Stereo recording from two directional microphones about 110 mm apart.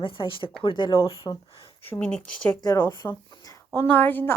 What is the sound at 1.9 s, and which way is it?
Speech, 10° left (ahead or behind).